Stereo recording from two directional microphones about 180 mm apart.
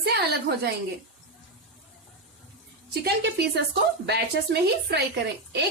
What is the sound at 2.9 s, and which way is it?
A woman's voice, 65° right (ahead or behind).